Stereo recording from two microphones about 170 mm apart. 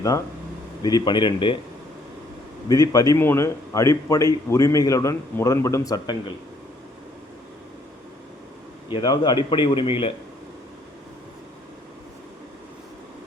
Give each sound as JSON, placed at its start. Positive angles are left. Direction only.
{"t": 0.8, "sound": "a man's voice", "side_deg": 25}
{"t": 2.6, "sound": "a man's voice", "side_deg": 20}
{"t": 8.9, "sound": "a man's voice", "side_deg": 25}